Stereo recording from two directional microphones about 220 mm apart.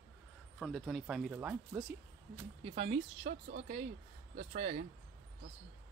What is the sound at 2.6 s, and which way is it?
Speech, 25° right (ahead or behind).